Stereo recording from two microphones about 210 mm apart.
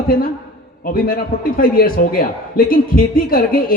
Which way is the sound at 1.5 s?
45° left (ahead or behind).